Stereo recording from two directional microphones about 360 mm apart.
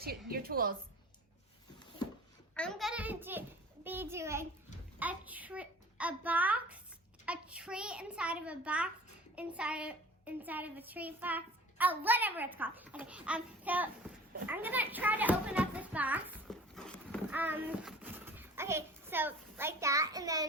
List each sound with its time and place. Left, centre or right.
0.3 s a woman's voice: right
2.6 s a child's voice: centre